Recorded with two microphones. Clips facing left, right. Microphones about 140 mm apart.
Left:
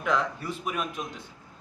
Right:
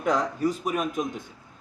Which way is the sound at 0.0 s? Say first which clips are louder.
Right 4 dB; 40° right (ahead or behind).